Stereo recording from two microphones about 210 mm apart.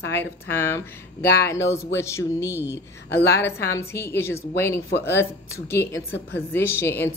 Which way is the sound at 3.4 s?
15° left (ahead or behind).